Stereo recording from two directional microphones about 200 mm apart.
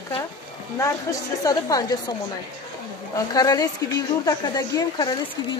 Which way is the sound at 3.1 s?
20° left (ahead or behind).